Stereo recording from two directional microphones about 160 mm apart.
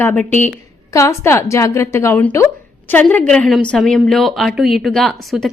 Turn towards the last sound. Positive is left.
turn(degrees=0)  # may be behind; listen again after turning